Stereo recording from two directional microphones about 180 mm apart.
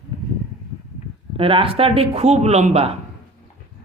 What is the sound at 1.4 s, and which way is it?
Speech, 30° right (ahead or behind).